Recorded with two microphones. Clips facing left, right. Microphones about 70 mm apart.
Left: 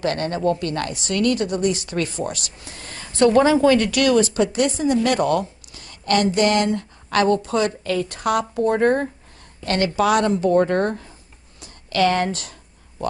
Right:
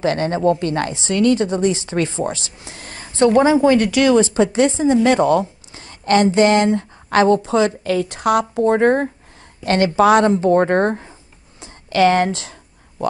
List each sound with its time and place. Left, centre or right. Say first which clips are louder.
0.0 s a woman's voice: right 4 dB; right
11.6 s a sound: right 4 dB; right
12.3 s a woman's voice: right 3 dB; right